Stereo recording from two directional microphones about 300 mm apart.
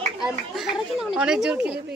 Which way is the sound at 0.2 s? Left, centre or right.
Centre.